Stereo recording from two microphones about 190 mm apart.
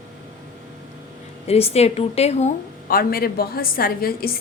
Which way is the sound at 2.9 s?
50° left (ahead or behind).